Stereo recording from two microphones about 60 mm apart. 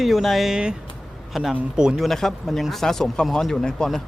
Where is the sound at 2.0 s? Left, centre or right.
Centre.